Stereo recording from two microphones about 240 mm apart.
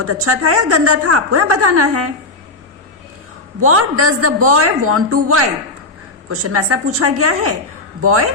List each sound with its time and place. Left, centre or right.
0.0 s a woman's voice: right
3.6 s a woman's voice: right